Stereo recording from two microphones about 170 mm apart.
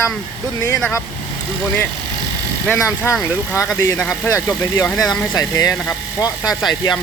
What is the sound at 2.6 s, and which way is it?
Speech, 10° left (ahead or behind).